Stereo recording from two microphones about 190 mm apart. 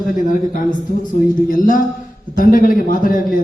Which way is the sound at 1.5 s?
45° left (ahead or behind).